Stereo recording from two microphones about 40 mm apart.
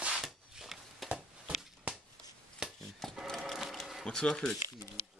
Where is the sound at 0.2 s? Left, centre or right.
Centre.